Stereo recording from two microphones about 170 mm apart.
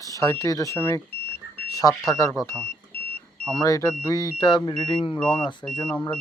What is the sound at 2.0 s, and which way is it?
Speech, 20° left (ahead or behind).